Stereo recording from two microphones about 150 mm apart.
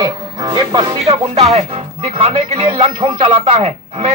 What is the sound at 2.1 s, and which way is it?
Speech, 40° right (ahead or behind).